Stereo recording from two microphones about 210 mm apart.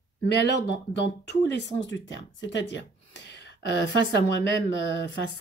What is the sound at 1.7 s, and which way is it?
Speech, 60° left (ahead or behind).